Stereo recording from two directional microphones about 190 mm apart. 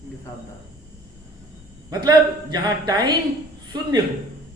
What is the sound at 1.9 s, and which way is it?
A man's voice, 20° right (ahead or behind).